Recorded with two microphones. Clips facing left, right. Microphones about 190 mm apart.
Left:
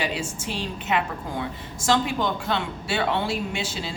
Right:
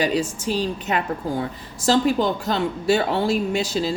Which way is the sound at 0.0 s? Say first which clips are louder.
Right 7 dB; 40° right (ahead or behind).